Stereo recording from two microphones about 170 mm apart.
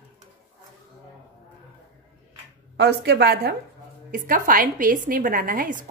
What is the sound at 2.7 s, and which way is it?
Speech, 85° right.